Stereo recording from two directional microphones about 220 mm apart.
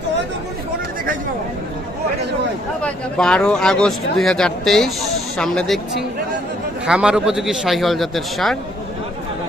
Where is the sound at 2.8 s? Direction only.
5° left (ahead or behind).